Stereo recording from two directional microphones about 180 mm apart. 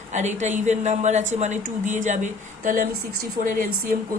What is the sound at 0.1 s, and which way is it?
A woman's voice, 40° right (ahead or behind).